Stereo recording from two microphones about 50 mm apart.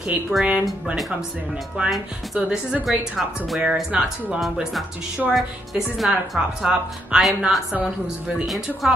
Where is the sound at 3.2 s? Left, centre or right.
Centre.